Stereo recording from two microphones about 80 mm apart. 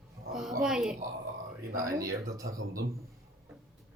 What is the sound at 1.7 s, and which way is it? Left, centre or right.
Speech, right.